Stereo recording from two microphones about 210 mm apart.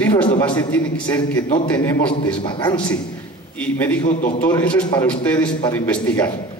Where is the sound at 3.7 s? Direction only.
10° left (ahead or behind).